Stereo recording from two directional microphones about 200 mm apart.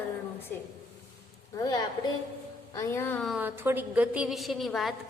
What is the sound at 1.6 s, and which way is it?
A woman's voice, 20° left (ahead or behind).